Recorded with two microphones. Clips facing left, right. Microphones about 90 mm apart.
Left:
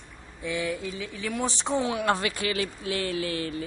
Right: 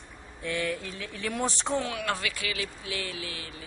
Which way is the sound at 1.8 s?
25° left (ahead or behind).